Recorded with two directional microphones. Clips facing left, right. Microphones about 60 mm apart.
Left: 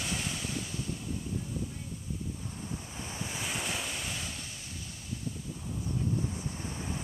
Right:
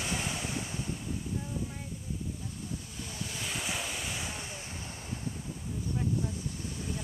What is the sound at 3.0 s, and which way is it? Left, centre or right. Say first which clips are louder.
Waves: left 1 dB; left.